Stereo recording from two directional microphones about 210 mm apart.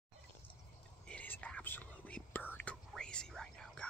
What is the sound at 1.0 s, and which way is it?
Whispering, 5° left (ahead or behind).